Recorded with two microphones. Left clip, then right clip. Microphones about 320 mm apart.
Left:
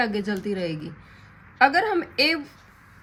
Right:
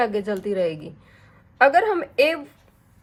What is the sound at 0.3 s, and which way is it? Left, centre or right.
A woman's voice, centre.